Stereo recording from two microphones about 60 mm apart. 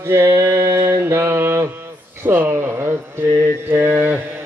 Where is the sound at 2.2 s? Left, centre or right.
Right.